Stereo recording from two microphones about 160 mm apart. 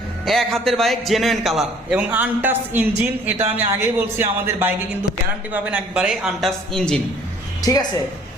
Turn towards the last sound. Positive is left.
turn(degrees=20)  # may be behind; listen again after turning